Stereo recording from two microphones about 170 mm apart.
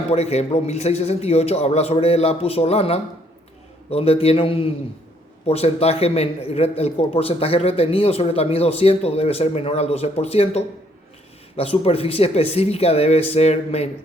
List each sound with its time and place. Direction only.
0.1 s a man's voice: 40° left (ahead or behind)